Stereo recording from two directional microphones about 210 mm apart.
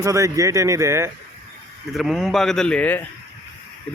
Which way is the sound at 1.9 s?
Centre (ahead or behind).